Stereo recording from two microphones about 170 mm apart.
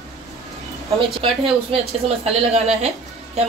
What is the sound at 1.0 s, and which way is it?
A woman's voice, 35° right (ahead or behind).